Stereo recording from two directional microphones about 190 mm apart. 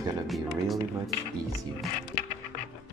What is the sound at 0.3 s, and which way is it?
Speech, centre (ahead or behind).